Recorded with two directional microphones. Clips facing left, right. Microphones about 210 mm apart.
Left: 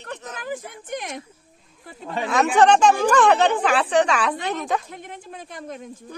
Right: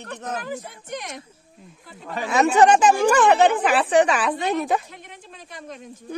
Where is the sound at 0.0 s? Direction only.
50° right (ahead or behind).